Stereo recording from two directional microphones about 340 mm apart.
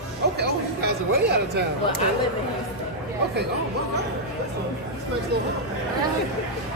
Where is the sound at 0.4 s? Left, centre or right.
Right.